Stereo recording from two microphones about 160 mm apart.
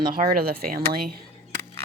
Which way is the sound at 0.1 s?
60° right (ahead or behind).